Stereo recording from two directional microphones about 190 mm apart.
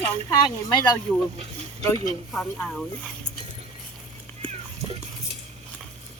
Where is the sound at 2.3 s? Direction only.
5° left (ahead or behind).